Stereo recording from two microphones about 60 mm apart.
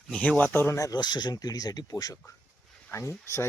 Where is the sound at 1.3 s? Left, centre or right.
Left.